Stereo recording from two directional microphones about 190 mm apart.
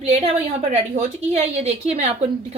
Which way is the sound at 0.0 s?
30° right (ahead or behind).